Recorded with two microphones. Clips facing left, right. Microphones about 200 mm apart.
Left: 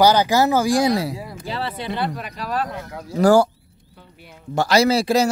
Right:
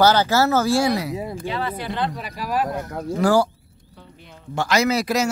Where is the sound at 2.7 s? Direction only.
50° right (ahead or behind).